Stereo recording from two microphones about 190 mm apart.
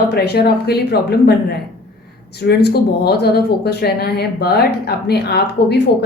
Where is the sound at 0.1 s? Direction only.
55° left (ahead or behind).